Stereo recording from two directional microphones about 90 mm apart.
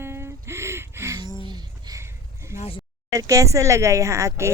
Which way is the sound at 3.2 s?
35° right (ahead or behind).